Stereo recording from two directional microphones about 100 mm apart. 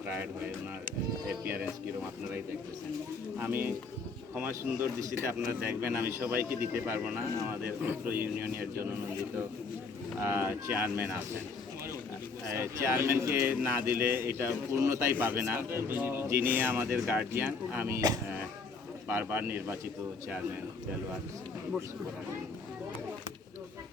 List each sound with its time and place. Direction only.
0.0 s speech: 20° right (ahead or behind)
3.3 s speech: 20° right (ahead or behind)
10.2 s speech: 20° right (ahead or behind)
12.5 s speech: 25° right (ahead or behind)
19.0 s speech: 20° right (ahead or behind)